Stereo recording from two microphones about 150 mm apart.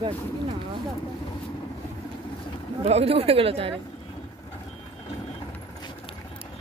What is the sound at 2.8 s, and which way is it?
Speech, 40° right (ahead or behind).